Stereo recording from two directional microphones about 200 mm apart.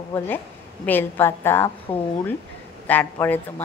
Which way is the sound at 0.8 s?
10° left (ahead or behind).